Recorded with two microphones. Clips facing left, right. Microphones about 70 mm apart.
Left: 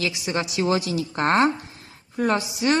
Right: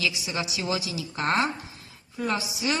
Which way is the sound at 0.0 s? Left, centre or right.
Left.